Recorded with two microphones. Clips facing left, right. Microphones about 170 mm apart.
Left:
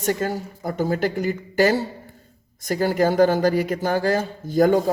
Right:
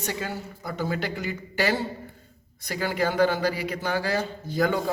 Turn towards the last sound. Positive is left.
turn(degrees=45)  # may be behind; listen again after turning